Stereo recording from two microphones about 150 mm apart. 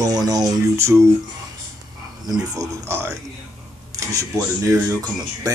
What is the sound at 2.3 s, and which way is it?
Speech, 20° right (ahead or behind).